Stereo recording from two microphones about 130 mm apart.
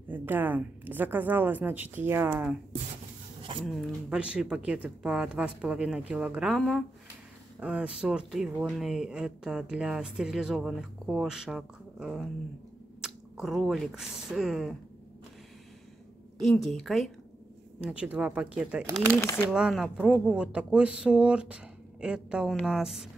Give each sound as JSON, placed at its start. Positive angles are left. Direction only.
{"t": 0.1, "sound": "a woman's voice", "side_deg": -15}
{"t": 3.6, "sound": "a woman's voice", "side_deg": 0}
{"t": 16.3, "sound": "a woman's voice", "side_deg": 0}
{"t": 19.1, "sound": "speech", "side_deg": 20}
{"t": 19.5, "sound": "a woman's voice", "side_deg": -5}